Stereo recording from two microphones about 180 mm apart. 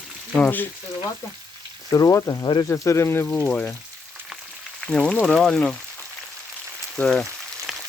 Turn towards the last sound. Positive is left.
turn(degrees=0)  # may be behind; listen again after turning